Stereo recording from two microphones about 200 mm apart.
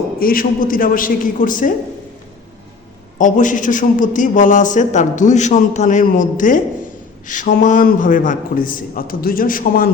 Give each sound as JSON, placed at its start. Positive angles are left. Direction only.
{"t": 0.2, "sound": "a man's voice", "side_deg": 45}
{"t": 3.2, "sound": "a man's voice", "side_deg": 40}